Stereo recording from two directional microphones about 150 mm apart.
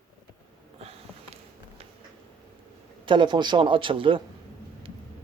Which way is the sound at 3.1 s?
30° right (ahead or behind).